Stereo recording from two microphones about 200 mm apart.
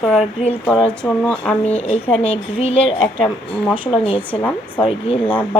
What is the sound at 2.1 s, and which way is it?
A woman's voice, 30° left (ahead or behind).